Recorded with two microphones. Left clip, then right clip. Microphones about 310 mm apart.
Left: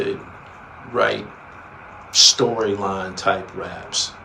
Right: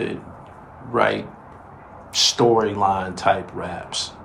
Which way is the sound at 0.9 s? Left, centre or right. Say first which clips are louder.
Even; right.